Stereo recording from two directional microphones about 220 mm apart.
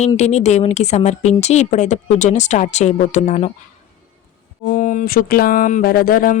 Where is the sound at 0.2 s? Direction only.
30° left (ahead or behind).